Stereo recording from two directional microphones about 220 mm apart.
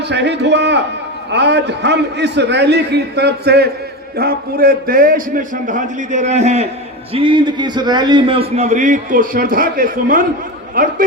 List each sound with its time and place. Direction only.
0.0 s a man's voice: 50° right (ahead or behind)